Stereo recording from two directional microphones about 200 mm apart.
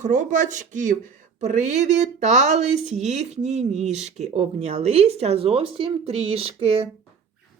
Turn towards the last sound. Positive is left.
turn(degrees=-30)  # may be behind; listen again after turning